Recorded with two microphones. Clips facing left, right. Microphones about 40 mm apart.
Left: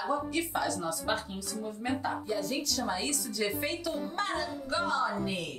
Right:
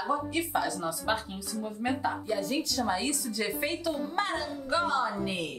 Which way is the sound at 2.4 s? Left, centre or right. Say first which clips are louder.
Right 3 dB; right.